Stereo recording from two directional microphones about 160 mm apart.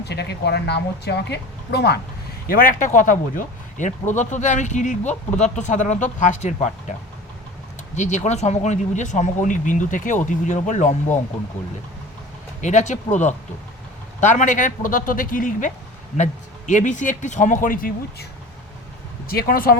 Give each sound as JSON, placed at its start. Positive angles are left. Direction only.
{"t": 0.0, "sound": "speech", "side_deg": 90}
{"t": 2.5, "sound": "speech", "side_deg": 60}
{"t": 7.9, "sound": "speech", "side_deg": 45}
{"t": 12.6, "sound": "speech", "side_deg": 50}
{"t": 19.3, "sound": "speech", "side_deg": 70}